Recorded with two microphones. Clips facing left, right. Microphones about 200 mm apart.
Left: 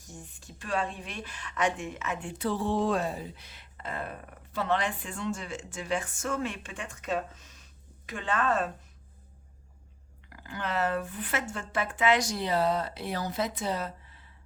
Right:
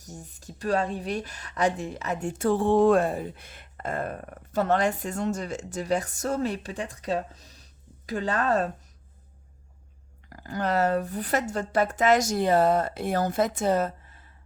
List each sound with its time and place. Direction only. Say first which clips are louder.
0.0 s speech: right 4 dB; 40° right (ahead or behind)
10.2 s speech: right 7 dB; 40° right (ahead or behind)